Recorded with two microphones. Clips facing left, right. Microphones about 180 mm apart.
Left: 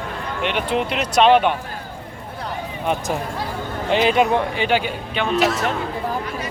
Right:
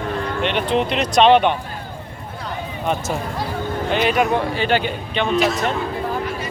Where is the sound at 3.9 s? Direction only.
25° left (ahead or behind); by 5.4 s 10° left (ahead or behind).